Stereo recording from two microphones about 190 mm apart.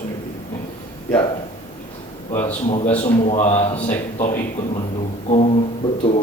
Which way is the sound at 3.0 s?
35° left (ahead or behind).